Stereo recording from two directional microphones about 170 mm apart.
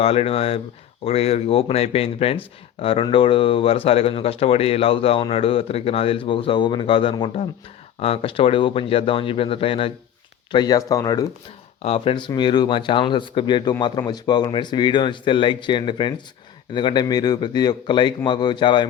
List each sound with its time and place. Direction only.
0.0 s a man's voice: 35° left (ahead or behind)
11.8 s a man's voice: 35° left (ahead or behind)